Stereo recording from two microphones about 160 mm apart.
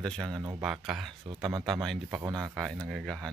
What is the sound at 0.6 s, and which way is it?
Speech, 5° right (ahead or behind).